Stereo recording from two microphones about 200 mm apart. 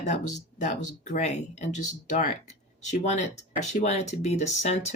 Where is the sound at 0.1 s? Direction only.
35° left (ahead or behind).